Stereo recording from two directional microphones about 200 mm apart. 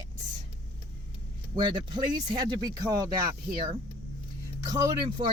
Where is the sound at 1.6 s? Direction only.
20° right (ahead or behind).